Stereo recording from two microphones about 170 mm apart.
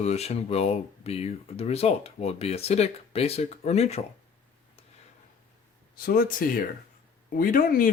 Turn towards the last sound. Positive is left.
turn(degrees=55)  # may be behind; listen again after turning